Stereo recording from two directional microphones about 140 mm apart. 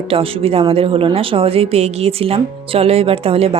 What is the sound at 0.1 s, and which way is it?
A woman's voice, 45° right (ahead or behind).